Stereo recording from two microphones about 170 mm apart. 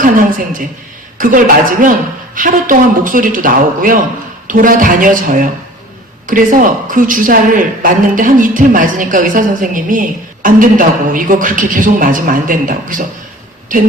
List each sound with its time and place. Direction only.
0.0 s a woman's voice: 50° right (ahead or behind)